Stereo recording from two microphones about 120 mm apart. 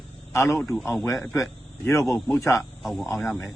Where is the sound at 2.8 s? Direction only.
Centre (ahead or behind).